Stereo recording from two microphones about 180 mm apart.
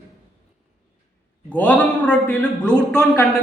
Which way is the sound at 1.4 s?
5° left (ahead or behind).